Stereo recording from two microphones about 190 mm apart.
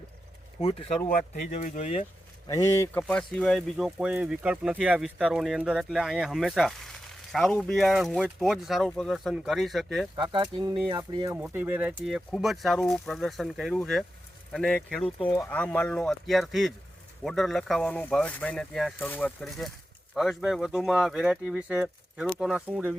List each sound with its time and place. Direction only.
0.6 s speech: 30° left (ahead or behind)
2.5 s speech: 15° left (ahead or behind)
10.3 s speech: 25° right (ahead or behind)
11.3 s speech: 10° right (ahead or behind)
15.2 s speech: 20° left (ahead or behind); by 23.0 s 5° right (ahead or behind)